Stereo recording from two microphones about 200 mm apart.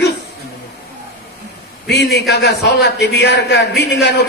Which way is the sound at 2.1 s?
55° left (ahead or behind).